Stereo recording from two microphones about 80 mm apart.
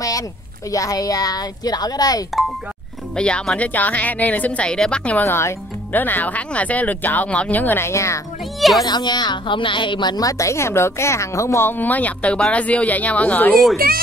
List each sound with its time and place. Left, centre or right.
0.7 s speech: left
3.2 s speech: centre
5.2 s a woman's voice: left
8.5 s speech: centre
8.8 s a woman's voice: left
10.2 s a woman's voice: left; by 13.6 s centre